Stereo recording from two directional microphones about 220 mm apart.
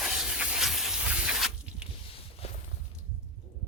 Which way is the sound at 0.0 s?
Centre (ahead or behind).